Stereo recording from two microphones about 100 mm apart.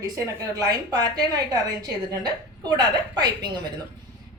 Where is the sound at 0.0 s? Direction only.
35° right (ahead or behind).